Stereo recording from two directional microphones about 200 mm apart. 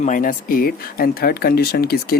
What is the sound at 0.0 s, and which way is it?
Speech, 40° left (ahead or behind).